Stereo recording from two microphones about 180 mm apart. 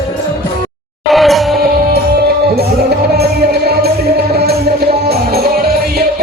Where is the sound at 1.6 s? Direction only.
60° right (ahead or behind).